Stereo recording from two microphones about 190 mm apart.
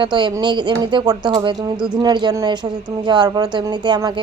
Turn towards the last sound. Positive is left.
turn(degrees=-25)  # may be behind; listen again after turning